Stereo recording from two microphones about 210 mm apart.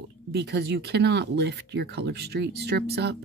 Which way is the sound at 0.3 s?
50° right (ahead or behind).